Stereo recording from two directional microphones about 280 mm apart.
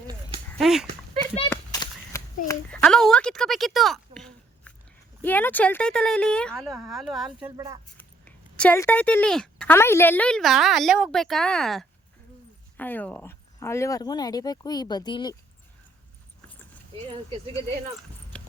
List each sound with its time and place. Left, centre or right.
0.5 s speech: centre
1.5 s a sound: centre
5.2 s a woman's voice: centre
7.9 s speech: centre
17.1 s speech: centre